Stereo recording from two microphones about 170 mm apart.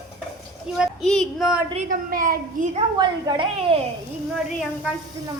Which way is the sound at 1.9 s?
55° right (ahead or behind).